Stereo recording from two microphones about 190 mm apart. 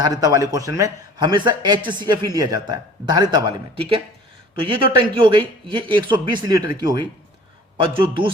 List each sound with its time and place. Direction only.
0.0 s a man's voice: 20° right (ahead or behind)